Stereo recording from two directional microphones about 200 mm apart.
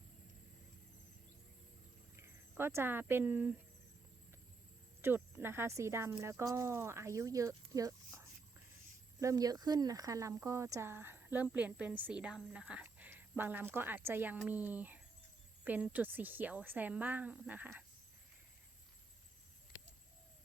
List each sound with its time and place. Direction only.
2.1 s speech: 10° right (ahead or behind)
5.0 s speech: 10° right (ahead or behind)